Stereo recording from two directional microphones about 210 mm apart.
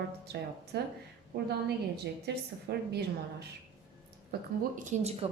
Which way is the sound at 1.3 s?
45° right (ahead or behind).